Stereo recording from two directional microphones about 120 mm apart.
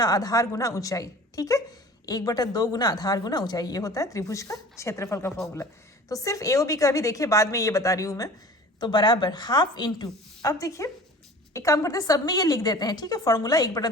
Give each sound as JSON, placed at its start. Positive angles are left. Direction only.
{"t": 0.0, "sound": "a woman's voice", "side_deg": 30}
{"t": 10.5, "sound": "a woman's voice", "side_deg": 25}